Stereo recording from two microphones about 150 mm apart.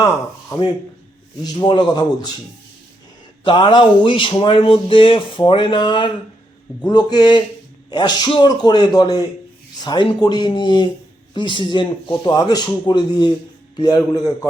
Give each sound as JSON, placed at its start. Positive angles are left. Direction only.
{"t": 1.5, "sound": "speech", "side_deg": 30}
{"t": 3.4, "sound": "speech", "side_deg": 30}